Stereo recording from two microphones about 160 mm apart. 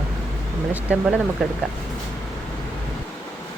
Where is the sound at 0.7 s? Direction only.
10° right (ahead or behind).